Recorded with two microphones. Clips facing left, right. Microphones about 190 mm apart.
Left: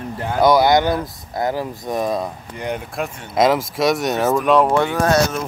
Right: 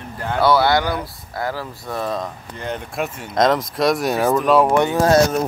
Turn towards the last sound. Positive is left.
turn(degrees=-25)  # may be behind; listen again after turning